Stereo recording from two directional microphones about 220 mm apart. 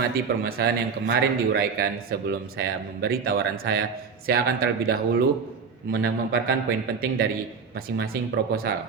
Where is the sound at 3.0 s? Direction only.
45° right (ahead or behind).